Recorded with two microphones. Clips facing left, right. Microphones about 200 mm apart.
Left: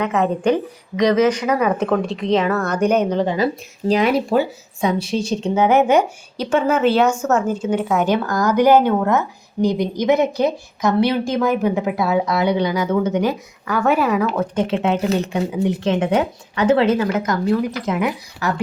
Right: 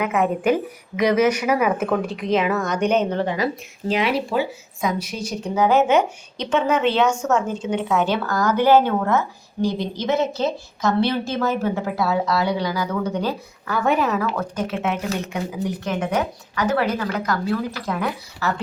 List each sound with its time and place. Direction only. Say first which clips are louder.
0.0 s a woman's voice: left 2 dB; 10° right (ahead or behind)
2.8 s a woman's voice: left 3 dB; 10° left (ahead or behind)
3.2 s speech: left 4 dB; 25° left (ahead or behind); by 4.4 s 45° left (ahead or behind)
4.8 s a woman's voice: left 5 dB; 30° left (ahead or behind); by 14.4 s 15° left (ahead or behind)
14.5 s speech: left 5 dB; 30° left (ahead or behind)